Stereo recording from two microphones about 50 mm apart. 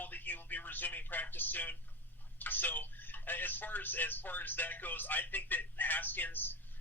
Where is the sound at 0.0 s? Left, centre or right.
Left.